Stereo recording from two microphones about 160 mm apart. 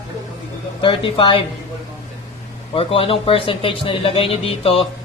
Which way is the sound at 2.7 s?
35° left (ahead or behind).